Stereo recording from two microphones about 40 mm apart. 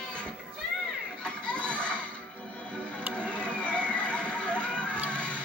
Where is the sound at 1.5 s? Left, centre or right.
Left.